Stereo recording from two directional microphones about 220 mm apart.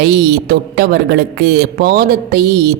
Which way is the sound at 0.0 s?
45° right (ahead or behind).